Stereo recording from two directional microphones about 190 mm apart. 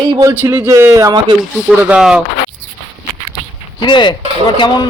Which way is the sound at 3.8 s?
25° left (ahead or behind).